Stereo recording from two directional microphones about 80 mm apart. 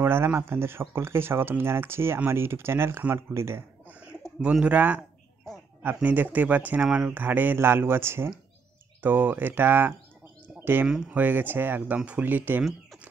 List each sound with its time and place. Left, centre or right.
0.0 s speech: right
4.4 s speech: centre
6.0 s speech: right
10.9 s speech: centre
11.1 s speech: right